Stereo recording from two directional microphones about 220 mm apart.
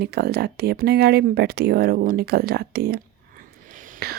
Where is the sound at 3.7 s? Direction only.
40° right (ahead or behind).